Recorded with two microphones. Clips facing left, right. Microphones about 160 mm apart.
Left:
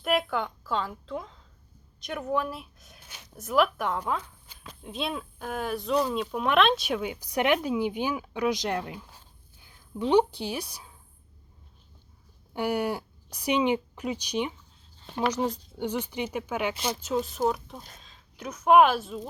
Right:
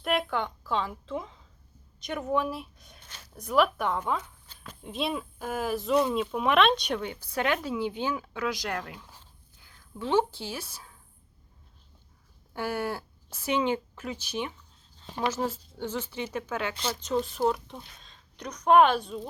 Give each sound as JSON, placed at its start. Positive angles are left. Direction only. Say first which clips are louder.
{"t": 0.0, "sound": "a woman's voice", "louder": "left 1 dB", "side_deg": 0}
{"t": 3.3, "sound": "speech", "louder": "even", "side_deg": 0}
{"t": 12.5, "sound": "speech", "louder": "left 3 dB", "side_deg": 15}